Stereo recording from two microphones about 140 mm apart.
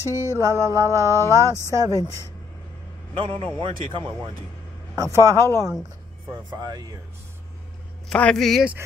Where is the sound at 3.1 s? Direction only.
40° right (ahead or behind).